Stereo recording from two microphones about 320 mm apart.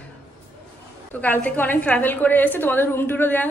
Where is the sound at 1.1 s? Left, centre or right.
Centre.